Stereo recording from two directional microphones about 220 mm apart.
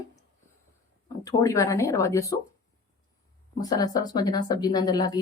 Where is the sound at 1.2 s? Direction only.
15° left (ahead or behind).